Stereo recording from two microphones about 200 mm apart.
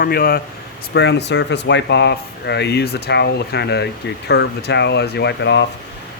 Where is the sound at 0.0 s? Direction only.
45° left (ahead or behind).